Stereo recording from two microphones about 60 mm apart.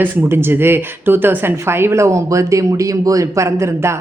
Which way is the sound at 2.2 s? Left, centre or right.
Right.